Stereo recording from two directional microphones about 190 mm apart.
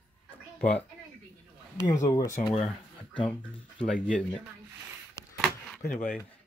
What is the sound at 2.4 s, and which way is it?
Speech, 30° left (ahead or behind).